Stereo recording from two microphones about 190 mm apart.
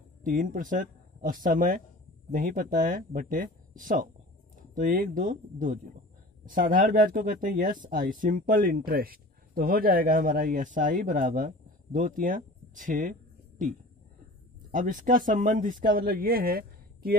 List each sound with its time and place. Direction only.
0.2 s speech: 45° right (ahead or behind)
14.7 s speech: 40° right (ahead or behind)